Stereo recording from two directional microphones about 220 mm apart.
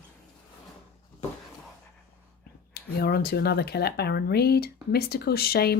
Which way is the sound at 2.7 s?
45° left (ahead or behind).